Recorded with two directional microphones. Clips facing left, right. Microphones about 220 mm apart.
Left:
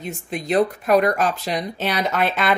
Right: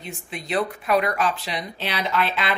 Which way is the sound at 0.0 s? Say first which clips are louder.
Left 6 dB; 45° left (ahead or behind).